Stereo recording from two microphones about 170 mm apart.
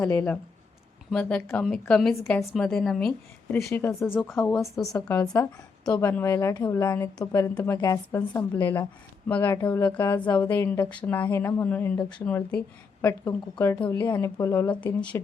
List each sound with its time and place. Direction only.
0.0 s a woman's voice: 10° left (ahead or behind)
3.7 s a woman's voice: 15° left (ahead or behind)
4.8 s a woman's voice: centre (ahead or behind)
5.0 s a woman's voice: 20° left (ahead or behind)